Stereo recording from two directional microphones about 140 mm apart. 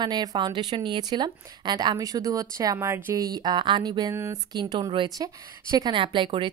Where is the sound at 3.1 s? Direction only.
30° right (ahead or behind).